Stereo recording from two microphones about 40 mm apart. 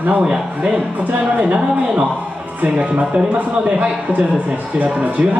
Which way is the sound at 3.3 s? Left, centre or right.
Right.